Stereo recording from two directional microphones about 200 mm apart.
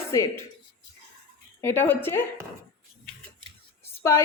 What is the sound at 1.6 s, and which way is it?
Speech, 10° left (ahead or behind).